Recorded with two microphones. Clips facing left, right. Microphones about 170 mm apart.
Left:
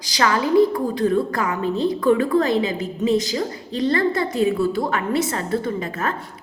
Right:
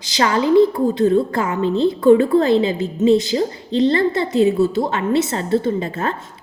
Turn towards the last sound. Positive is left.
turn(degrees=-30)  # may be behind; listen again after turning